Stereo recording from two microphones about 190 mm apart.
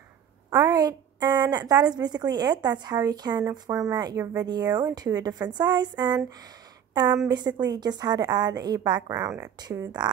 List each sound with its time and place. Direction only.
0.5 s a woman's voice: 20° right (ahead or behind)